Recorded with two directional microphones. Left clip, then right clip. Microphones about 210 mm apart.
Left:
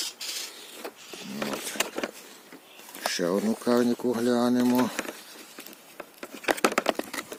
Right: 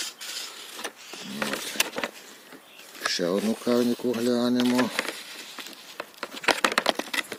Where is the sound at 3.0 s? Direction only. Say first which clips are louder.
Right 1 dB; centre (ahead or behind).